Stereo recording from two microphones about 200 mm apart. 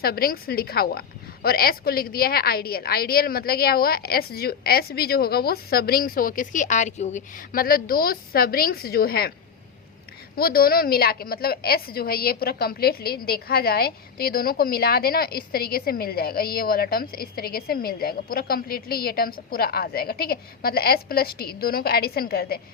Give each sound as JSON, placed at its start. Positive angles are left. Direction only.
{"t": 0.0, "sound": "a woman's voice", "side_deg": 50}
{"t": 10.3, "sound": "a woman's voice", "side_deg": 50}